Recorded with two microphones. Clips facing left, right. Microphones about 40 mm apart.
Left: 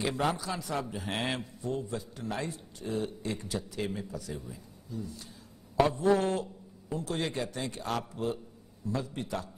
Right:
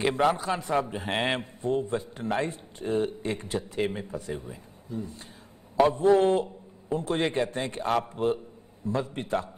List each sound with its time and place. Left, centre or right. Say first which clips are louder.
0.0 s a man's voice: right 6 dB; right